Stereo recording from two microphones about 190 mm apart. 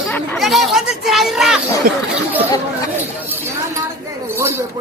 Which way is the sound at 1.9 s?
50° right (ahead or behind).